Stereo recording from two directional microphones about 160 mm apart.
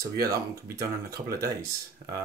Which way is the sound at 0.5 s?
20° right (ahead or behind).